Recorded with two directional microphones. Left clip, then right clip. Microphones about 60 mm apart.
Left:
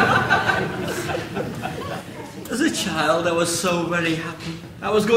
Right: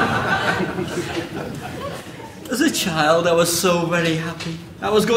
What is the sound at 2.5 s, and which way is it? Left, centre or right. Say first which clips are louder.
A man's voice: right 2 dB; centre.